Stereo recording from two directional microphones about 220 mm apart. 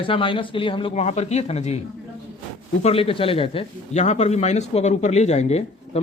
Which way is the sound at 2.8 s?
25° left (ahead or behind).